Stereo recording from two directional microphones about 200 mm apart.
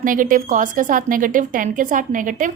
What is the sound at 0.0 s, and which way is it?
A woman's voice, 40° right (ahead or behind).